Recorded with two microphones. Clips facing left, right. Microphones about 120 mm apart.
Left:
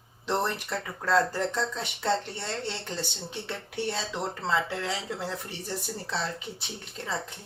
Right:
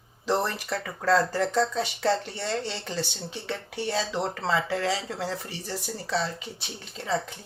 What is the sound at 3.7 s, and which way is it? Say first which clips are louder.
Speech: right 2 dB; 90° right.